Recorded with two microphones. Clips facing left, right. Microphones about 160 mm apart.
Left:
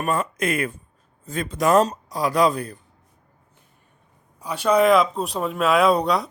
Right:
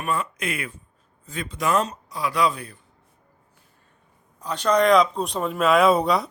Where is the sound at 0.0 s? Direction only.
45° left (ahead or behind).